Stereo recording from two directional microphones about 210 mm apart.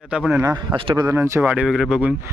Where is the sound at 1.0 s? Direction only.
10° right (ahead or behind).